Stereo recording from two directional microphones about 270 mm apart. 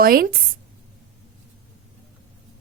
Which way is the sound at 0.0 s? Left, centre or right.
Right.